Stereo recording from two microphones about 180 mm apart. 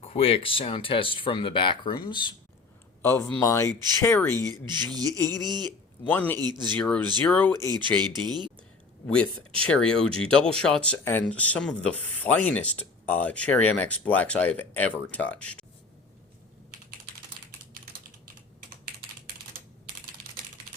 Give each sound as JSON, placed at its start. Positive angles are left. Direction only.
{"t": 0.0, "sound": "speech", "side_deg": 30}
{"t": 3.0, "sound": "speech", "side_deg": 15}
{"t": 3.8, "sound": "speech", "side_deg": -20}
{"t": 4.0, "sound": "speech", "side_deg": 10}
{"t": 4.3, "sound": "speech", "side_deg": -20}
{"t": 6.1, "sound": "speech", "side_deg": 10}
{"t": 6.4, "sound": "speech", "side_deg": -25}
{"t": 6.7, "sound": "speech", "side_deg": 5}
{"t": 7.9, "sound": "speech", "side_deg": -25}
{"t": 9.6, "sound": "speech", "side_deg": 5}